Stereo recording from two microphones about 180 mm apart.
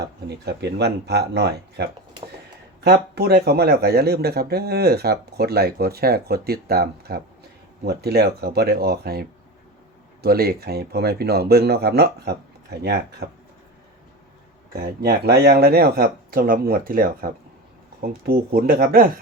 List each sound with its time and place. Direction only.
0.3 s speech: 70° right (ahead or behind)
10.2 s speech: 60° right (ahead or behind)
15.0 s speech: 65° right (ahead or behind)